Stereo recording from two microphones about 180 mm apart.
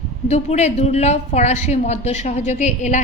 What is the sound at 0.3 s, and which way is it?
A woman's voice, 40° left (ahead or behind).